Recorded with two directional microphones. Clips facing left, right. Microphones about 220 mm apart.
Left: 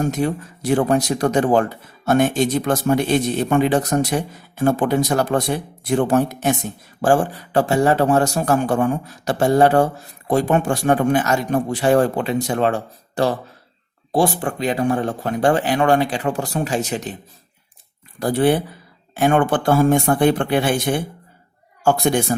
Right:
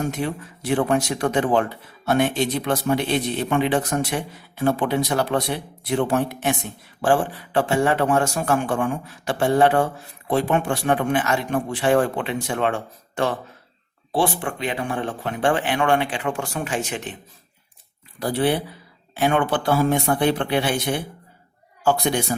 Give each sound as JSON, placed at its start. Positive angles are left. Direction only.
{"t": 0.0, "sound": "a man's voice", "side_deg": 40}
{"t": 18.2, "sound": "speech", "side_deg": 45}